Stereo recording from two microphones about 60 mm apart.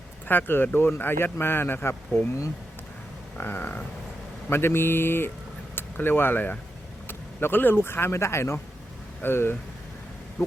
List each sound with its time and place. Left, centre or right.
0.3 s speech: left
3.3 s speech: left